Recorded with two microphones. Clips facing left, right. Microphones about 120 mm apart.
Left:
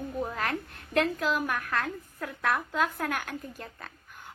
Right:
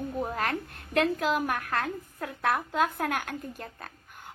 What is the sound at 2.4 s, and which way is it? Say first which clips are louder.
A woman's voice: right 1 dB; 35° right (ahead or behind).